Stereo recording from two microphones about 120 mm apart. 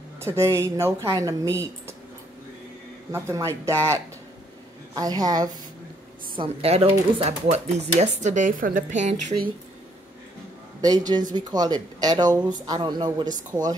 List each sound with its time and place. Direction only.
0.2 s speech: 20° right (ahead or behind)
3.1 s speech: 20° right (ahead or behind)
6.3 s speech: 50° right (ahead or behind); by 9.1 s 90° right
10.8 s speech: 35° right (ahead or behind)